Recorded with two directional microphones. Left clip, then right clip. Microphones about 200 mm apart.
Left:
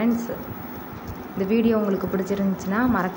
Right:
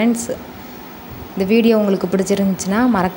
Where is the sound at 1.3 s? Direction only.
40° right (ahead or behind).